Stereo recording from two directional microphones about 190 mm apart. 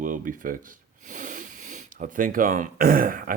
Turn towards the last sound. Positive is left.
turn(degrees=-50)  # may be behind; listen again after turning